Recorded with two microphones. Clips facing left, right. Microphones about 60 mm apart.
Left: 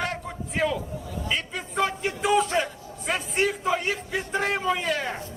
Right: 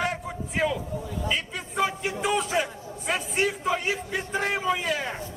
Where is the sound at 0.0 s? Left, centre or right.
Centre.